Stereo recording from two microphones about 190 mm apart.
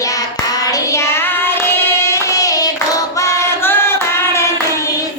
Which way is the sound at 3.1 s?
15° left (ahead or behind).